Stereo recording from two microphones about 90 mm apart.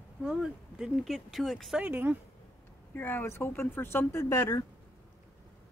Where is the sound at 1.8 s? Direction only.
20° right (ahead or behind).